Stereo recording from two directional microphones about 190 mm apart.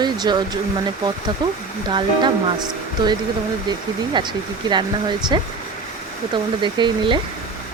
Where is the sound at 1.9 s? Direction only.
25° right (ahead or behind).